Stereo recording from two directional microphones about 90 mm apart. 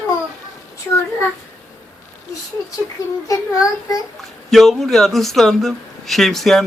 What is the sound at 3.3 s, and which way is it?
Speech, 40° left (ahead or behind).